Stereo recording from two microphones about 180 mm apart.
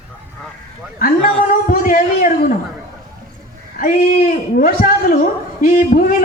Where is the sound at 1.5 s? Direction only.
50° left (ahead or behind).